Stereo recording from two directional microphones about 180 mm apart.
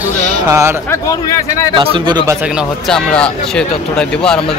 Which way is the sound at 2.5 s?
Centre (ahead or behind).